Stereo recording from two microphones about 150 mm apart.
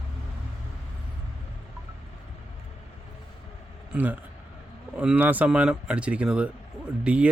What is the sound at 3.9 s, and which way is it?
A man's voice, 10° right (ahead or behind).